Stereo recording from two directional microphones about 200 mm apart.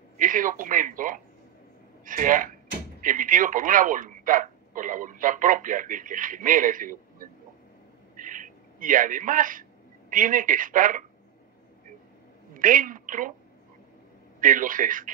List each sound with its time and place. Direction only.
0.2 s speech: 40° right (ahead or behind)
8.2 s a sound: 40° right (ahead or behind)
12.5 s a woman's voice: 40° right (ahead or behind)
14.4 s speech: 40° right (ahead or behind)